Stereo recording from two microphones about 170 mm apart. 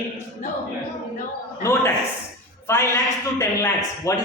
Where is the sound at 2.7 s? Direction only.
20° left (ahead or behind).